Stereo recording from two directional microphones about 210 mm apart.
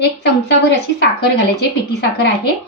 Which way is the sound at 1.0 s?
50° left (ahead or behind).